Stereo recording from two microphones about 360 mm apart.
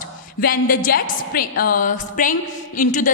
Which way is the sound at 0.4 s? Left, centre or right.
Left.